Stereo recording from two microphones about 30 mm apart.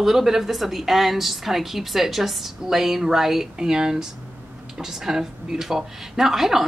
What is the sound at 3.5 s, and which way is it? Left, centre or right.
A woman's voice, right.